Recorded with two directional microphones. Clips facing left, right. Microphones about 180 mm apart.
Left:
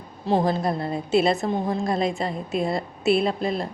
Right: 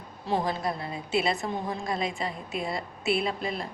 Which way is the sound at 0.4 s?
45° left (ahead or behind).